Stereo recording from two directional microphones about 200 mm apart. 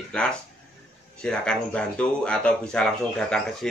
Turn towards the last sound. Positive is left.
turn(degrees=5)  # may be behind; listen again after turning